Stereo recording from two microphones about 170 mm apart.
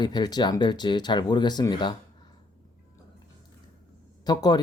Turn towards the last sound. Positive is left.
turn(degrees=25)  # may be behind; listen again after turning